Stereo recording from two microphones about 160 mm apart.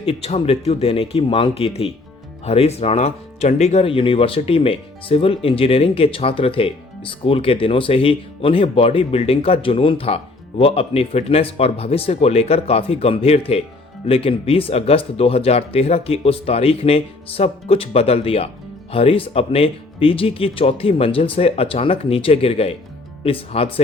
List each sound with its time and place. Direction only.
0.0 s speech: 40° left (ahead or behind)